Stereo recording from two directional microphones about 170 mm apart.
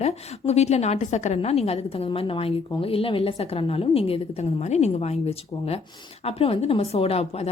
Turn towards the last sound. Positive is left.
turn(degrees=35)  # may be behind; listen again after turning